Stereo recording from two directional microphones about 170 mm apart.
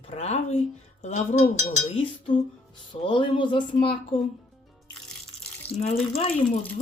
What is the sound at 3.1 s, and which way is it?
Speech, 30° left (ahead or behind).